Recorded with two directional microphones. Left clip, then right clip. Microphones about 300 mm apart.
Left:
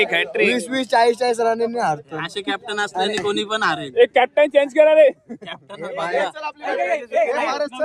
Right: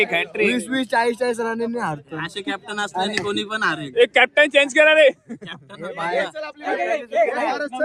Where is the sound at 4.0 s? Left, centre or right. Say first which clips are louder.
Even; right.